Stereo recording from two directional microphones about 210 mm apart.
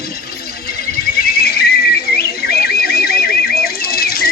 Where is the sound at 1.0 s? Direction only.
45° left (ahead or behind).